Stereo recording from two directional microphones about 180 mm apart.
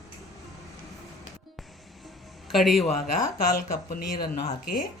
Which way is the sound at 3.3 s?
55° left (ahead or behind).